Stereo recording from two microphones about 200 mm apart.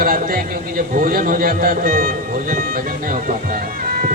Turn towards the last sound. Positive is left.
turn(degrees=-45)  # may be behind; listen again after turning